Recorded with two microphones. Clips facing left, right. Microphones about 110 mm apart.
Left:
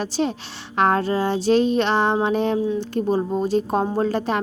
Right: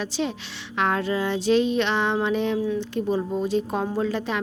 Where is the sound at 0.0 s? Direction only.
40° left (ahead or behind).